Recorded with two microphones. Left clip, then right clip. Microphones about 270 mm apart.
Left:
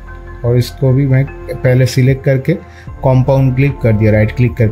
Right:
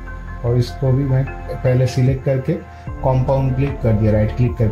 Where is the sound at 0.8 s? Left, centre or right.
Left.